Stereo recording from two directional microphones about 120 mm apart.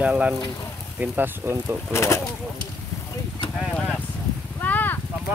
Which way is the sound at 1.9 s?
20° left (ahead or behind).